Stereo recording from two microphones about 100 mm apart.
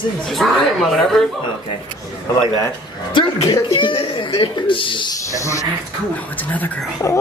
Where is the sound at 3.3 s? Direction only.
30° left (ahead or behind).